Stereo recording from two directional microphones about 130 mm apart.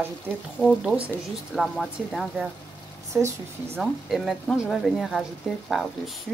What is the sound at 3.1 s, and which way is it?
Speech, 15° right (ahead or behind).